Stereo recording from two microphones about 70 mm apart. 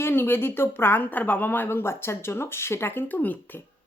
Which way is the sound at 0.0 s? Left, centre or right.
Left.